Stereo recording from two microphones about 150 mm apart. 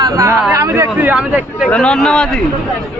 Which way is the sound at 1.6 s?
5° left (ahead or behind).